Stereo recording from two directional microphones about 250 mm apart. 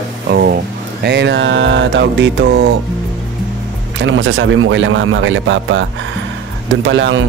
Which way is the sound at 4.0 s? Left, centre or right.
Right.